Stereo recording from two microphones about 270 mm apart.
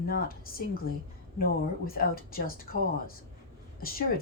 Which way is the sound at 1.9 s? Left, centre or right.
Left.